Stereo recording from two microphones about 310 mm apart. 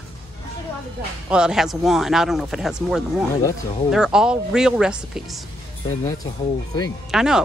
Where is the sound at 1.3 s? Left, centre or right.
Centre.